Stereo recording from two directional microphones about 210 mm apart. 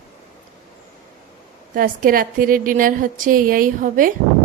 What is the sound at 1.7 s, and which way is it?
Speech, 40° right (ahead or behind).